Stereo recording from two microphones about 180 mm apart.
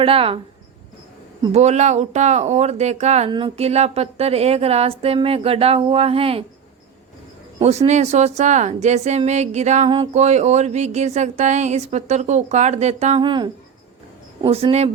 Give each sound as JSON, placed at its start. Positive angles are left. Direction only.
{"t": 0.0, "sound": "speech", "side_deg": -30}
{"t": 1.5, "sound": "speech", "side_deg": -40}
{"t": 7.6, "sound": "speech", "side_deg": -35}
{"t": 13.2, "sound": "speech", "side_deg": -25}